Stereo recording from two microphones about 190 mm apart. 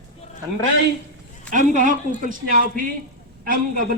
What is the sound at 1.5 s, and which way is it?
A man's voice, 40° right (ahead or behind).